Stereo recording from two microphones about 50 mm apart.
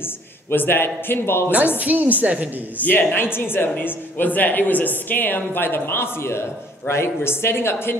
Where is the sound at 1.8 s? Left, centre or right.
Right.